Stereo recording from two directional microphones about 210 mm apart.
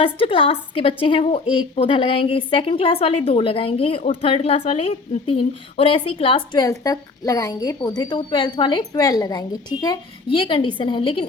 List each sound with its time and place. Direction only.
0.0 s a woman's voice: 25° left (ahead or behind)